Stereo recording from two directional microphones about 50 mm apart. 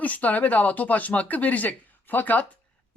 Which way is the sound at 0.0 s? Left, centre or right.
Left.